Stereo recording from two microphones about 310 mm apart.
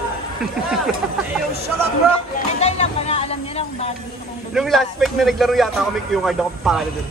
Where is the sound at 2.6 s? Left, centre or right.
Left.